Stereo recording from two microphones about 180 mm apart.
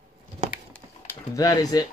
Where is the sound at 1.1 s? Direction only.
20° left (ahead or behind).